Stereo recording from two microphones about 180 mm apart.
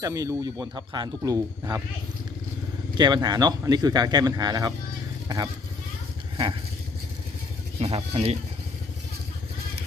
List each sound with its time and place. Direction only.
0.0 s speech: 15° right (ahead or behind)
3.0 s speech: 20° right (ahead or behind)
6.3 s vehicle: 25° right (ahead or behind)
7.8 s speech: 35° right (ahead or behind)